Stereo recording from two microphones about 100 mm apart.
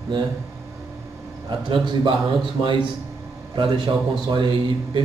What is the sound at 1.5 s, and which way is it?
Speech, 55° right (ahead or behind).